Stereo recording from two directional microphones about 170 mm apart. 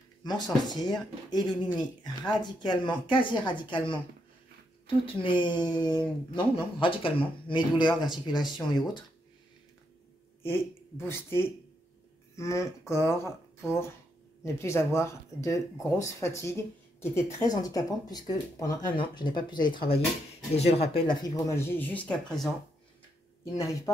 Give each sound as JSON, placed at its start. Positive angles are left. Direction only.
{"t": 0.2, "sound": "speech", "side_deg": 25}
{"t": 10.4, "sound": "speech", "side_deg": 15}
{"t": 23.4, "sound": "speech", "side_deg": 20}